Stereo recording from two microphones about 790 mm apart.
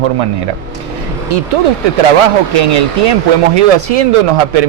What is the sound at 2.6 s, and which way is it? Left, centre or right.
Speech, right.